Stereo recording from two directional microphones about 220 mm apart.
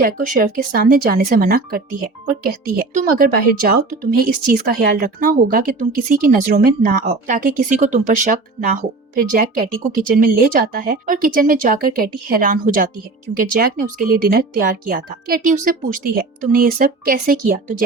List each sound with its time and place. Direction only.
0.0 s speech: 40° right (ahead or behind)